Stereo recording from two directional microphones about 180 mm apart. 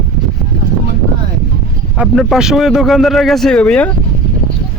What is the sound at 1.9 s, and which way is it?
A man's voice, centre (ahead or behind).